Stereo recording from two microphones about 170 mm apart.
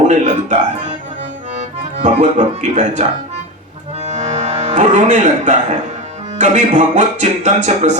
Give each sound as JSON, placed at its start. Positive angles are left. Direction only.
{"t": 0.1, "sound": "speech", "side_deg": -40}
{"t": 2.0, "sound": "speech", "side_deg": -45}
{"t": 4.0, "sound": "music", "side_deg": -40}
{"t": 6.4, "sound": "speech", "side_deg": -45}